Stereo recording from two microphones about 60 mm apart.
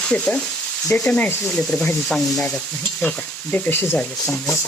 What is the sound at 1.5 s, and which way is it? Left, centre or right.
Sizzle, centre.